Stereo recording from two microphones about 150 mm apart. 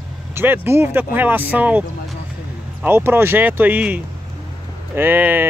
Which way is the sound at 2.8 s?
15° right (ahead or behind).